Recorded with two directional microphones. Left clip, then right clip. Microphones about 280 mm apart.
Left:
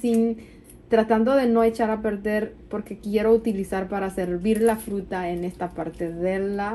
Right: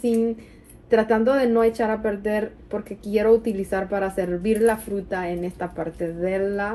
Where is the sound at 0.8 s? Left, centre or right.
Centre.